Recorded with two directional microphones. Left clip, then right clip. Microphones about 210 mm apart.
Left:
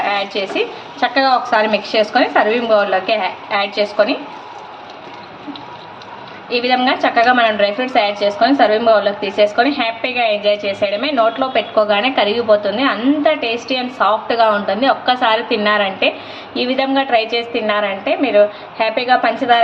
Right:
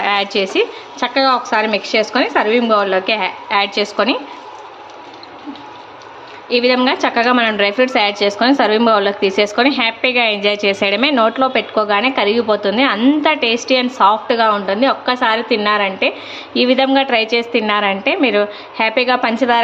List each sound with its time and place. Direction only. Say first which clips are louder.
0.1 s a woman's voice: right 3 dB; 30° right (ahead or behind)
6.5 s a woman's voice: right 1 dB; 25° right (ahead or behind)